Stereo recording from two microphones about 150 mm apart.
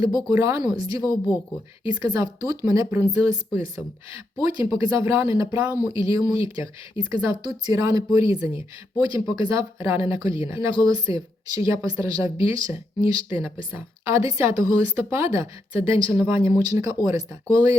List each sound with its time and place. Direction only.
0.0 s a woman's voice: 25° right (ahead or behind)